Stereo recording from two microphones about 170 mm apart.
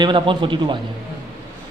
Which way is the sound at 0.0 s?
30° right (ahead or behind).